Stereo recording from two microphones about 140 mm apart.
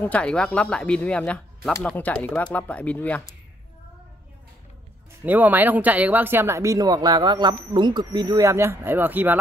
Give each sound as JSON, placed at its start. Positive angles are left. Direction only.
{"t": 0.0, "sound": "speech", "side_deg": 10}
{"t": 5.2, "sound": "speech", "side_deg": -10}